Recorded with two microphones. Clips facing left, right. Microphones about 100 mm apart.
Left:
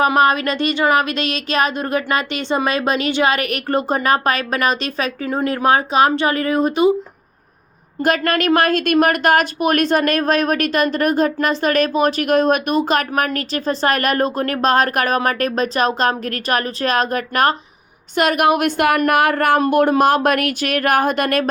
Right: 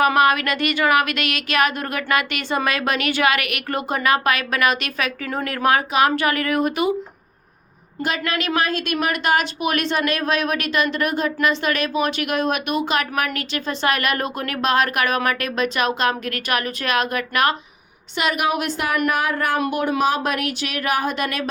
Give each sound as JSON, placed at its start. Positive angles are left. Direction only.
{"t": 0.0, "sound": "speech", "side_deg": 30}
{"t": 8.0, "sound": "a woman's voice", "side_deg": 50}
{"t": 18.1, "sound": "speech", "side_deg": 50}
{"t": 19.5, "sound": "a sound", "side_deg": 45}